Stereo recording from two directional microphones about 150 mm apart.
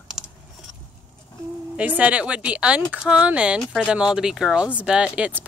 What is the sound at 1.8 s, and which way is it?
Speech, 10° right (ahead or behind).